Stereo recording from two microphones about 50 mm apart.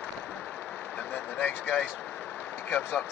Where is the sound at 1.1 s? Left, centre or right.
Left.